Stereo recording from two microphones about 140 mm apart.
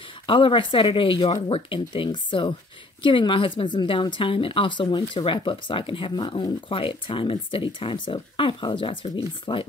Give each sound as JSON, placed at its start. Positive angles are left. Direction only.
{"t": 0.3, "sound": "a woman's voice", "side_deg": 35}